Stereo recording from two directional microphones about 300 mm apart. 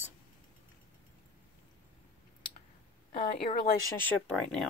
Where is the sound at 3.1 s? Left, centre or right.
Centre.